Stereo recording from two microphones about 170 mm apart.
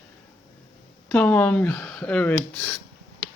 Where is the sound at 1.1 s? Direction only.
10° left (ahead or behind).